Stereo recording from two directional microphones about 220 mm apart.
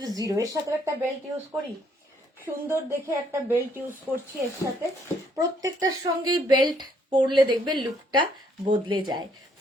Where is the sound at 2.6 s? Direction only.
10° right (ahead or behind).